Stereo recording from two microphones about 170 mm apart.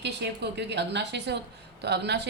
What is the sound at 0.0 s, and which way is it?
A woman's voice, 80° right.